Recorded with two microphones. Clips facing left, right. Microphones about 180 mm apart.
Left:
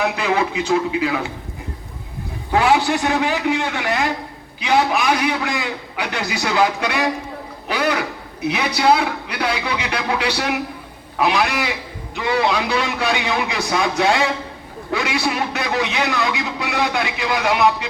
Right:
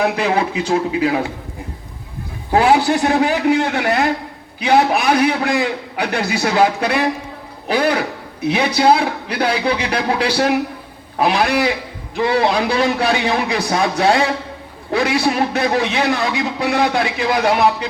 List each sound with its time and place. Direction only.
0.0 s a man's voice: 35° right (ahead or behind)
2.5 s a man's voice: 35° right (ahead or behind)
12.3 s a man's voice: 35° right (ahead or behind)